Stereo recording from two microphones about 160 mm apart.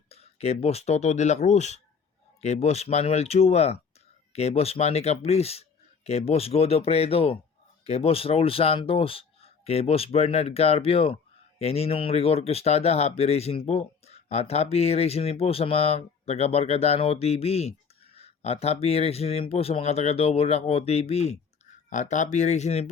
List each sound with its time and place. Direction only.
0.1 s speech: 40° left (ahead or behind)